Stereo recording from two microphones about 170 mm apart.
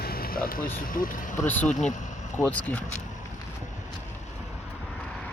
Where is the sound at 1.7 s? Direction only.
45° left (ahead or behind).